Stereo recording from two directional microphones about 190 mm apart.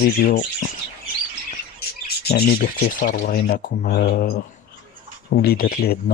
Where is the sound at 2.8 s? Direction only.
45° left (ahead or behind).